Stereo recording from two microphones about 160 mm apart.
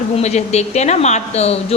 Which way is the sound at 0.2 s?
45° left (ahead or behind).